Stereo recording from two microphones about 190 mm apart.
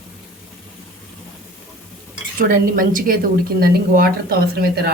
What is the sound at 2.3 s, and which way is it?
A woman's voice, 45° right (ahead or behind).